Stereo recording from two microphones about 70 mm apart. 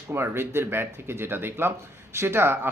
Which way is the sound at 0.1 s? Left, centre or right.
Right.